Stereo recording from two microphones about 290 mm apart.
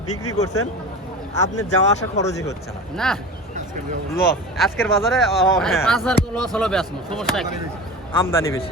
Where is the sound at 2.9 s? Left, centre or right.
Centre.